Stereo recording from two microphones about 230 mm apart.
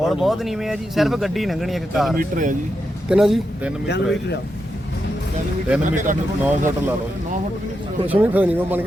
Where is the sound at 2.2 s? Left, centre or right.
Right.